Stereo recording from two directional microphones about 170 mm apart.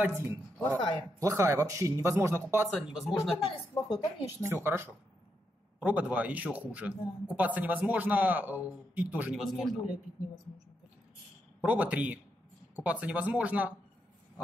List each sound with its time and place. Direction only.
0.0 s a man's voice: 15° right (ahead or behind)
2.7 s a man's voice: centre (ahead or behind)
3.4 s a woman's voice: 25° left (ahead or behind)
4.4 s a man's voice: 15° right (ahead or behind)
11.6 s a man's voice: 10° right (ahead or behind)